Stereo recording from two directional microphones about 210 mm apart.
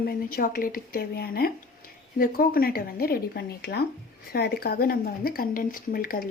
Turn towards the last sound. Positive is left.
turn(degrees=45)  # may be behind; listen again after turning